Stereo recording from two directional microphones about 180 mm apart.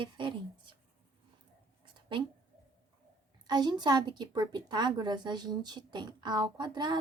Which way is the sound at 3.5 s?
25° right (ahead or behind).